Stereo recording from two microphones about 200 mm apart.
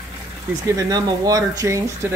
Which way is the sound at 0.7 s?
20° right (ahead or behind).